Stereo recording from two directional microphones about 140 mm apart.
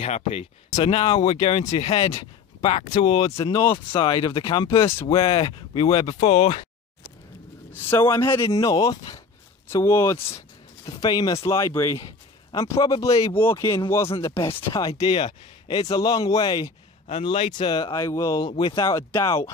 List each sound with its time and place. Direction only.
0.0 s speech: 45° left (ahead or behind)
6.1 s speech: 50° left (ahead or behind)
7.9 s speech: 20° left (ahead or behind)
14.3 s speech: 35° left (ahead or behind)
17.2 s speech: 45° left (ahead or behind); by 18.5 s 25° left (ahead or behind)
18.5 s speech: 40° left (ahead or behind)
18.8 s speech: 25° left (ahead or behind)